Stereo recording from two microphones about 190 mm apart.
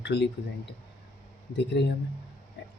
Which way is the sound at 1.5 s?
65° left (ahead or behind).